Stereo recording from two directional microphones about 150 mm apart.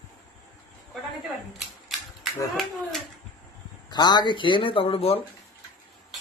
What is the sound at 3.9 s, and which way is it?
Speech, 30° left (ahead or behind).